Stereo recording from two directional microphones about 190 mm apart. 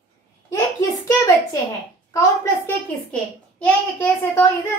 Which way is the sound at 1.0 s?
20° left (ahead or behind).